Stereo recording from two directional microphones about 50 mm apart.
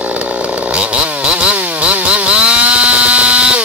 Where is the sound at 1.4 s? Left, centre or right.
Right.